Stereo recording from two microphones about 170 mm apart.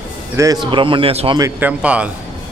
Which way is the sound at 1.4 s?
10° right (ahead or behind).